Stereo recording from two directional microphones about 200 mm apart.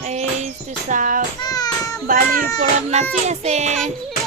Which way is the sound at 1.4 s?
20° left (ahead or behind).